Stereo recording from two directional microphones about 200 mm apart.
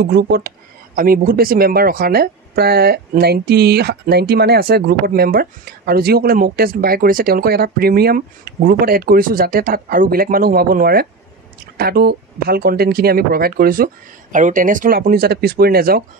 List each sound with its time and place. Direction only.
0.0 s speech: 50° right (ahead or behind)